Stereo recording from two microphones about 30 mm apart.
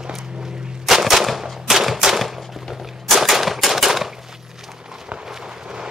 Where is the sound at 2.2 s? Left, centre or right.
Centre.